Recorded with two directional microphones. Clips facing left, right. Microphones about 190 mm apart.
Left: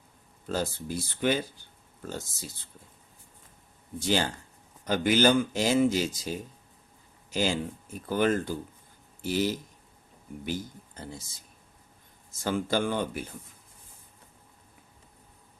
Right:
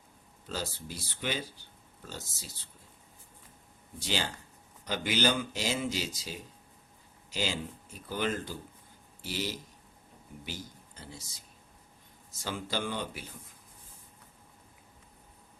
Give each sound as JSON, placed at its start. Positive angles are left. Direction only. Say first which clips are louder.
{"t": 0.4, "sound": "speech", "louder": "left 7 dB", "side_deg": 50}
{"t": 4.0, "sound": "speech", "louder": "left 7 dB", "side_deg": 50}
{"t": 12.3, "sound": "speech", "louder": "left 8 dB", "side_deg": 50}